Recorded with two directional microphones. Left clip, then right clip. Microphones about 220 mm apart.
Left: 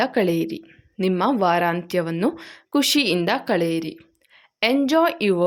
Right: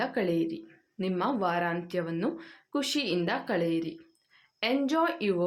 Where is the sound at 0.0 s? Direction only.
45° left (ahead or behind).